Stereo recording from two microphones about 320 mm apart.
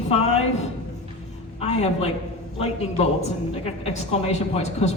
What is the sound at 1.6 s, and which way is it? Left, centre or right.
Speech, centre.